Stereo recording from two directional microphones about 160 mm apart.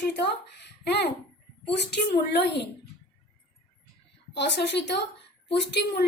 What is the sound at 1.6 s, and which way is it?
A woman's voice, 90° left.